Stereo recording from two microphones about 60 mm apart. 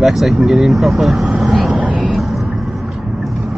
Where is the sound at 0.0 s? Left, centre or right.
Centre.